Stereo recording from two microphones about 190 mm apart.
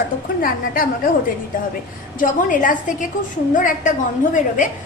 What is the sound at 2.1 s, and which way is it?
A woman's voice, 45° left (ahead or behind).